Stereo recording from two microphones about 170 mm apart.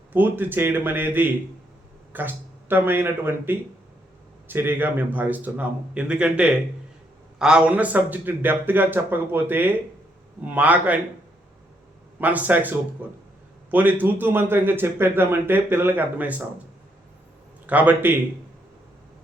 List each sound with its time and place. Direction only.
0.1 s a man's voice: 10° right (ahead or behind)
12.2 s a man's voice: 10° right (ahead or behind)
17.7 s a man's voice: 10° right (ahead or behind)